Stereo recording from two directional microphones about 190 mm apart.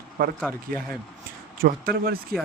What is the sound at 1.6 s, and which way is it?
Speech, 50° right (ahead or behind).